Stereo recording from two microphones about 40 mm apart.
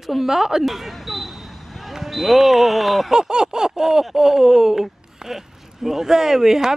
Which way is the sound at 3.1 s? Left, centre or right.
Centre.